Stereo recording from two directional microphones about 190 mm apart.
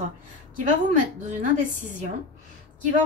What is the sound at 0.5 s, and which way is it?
A woman's voice, 40° right (ahead or behind).